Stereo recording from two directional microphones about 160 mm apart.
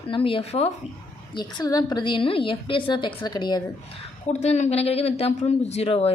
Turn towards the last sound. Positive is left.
turn(degrees=40)  # may be behind; listen again after turning